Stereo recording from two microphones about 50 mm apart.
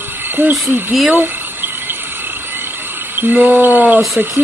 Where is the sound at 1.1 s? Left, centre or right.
Right.